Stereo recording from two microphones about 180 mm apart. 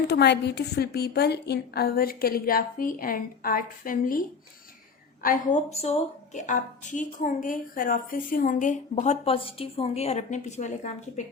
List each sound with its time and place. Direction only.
0.1 s a woman's voice: 70° left (ahead or behind); by 4.2 s 50° left (ahead or behind)
5.2 s a woman's voice: 45° left (ahead or behind)